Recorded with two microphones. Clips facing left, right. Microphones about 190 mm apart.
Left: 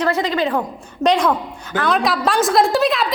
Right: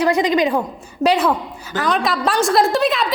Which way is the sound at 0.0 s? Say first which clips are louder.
Right 3 dB; 15° right (ahead or behind).